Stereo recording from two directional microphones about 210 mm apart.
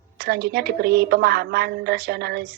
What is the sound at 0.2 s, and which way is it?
A woman's voice, 50° right (ahead or behind).